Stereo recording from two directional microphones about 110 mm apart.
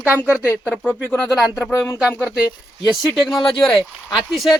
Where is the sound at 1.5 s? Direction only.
25° left (ahead or behind).